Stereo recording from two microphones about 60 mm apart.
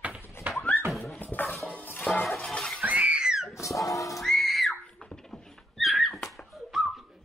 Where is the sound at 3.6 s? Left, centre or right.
Left.